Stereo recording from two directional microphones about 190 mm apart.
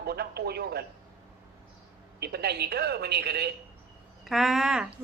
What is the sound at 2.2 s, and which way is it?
Speech, 55° right (ahead or behind).